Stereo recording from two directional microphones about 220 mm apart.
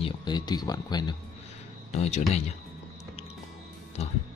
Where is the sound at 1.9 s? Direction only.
30° left (ahead or behind).